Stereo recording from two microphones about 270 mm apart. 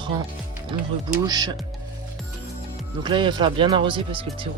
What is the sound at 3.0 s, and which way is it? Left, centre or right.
Speech, centre.